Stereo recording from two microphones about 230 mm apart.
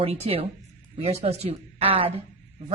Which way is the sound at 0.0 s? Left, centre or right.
Right.